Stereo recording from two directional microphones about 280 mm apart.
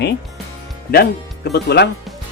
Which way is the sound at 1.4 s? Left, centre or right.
Left.